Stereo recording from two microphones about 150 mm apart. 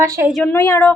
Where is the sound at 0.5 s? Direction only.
15° left (ahead or behind).